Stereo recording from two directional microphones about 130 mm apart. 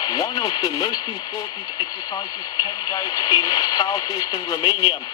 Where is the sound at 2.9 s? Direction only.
25° left (ahead or behind).